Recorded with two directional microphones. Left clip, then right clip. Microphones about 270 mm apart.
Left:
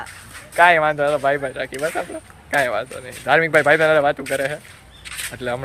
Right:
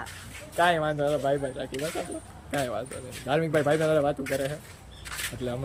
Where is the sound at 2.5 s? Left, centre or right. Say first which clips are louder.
Left 11 dB; left.